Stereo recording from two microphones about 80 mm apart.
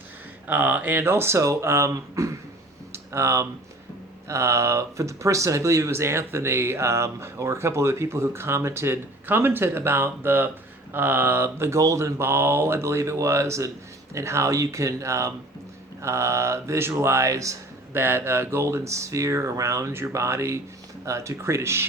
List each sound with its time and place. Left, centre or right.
0.4 s speech: right
2.9 s a sound: right
4.3 s speech: right
17.9 s speech: right